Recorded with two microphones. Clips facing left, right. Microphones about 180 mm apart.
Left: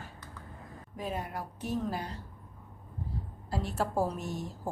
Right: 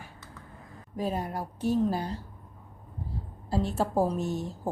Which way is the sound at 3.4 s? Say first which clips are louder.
Right 5 dB; 25° right (ahead or behind).